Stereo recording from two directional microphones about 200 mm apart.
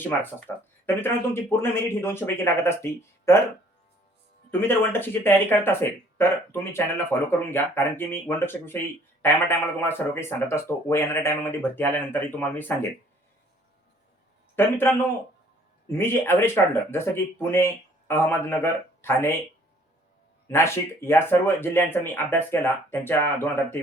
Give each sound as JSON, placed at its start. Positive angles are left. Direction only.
{"t": 0.2, "sound": "speech", "side_deg": 10}
{"t": 4.6, "sound": "speech", "side_deg": 10}
{"t": 14.5, "sound": "a man's voice", "side_deg": 10}
{"t": 20.5, "sound": "speech", "side_deg": 15}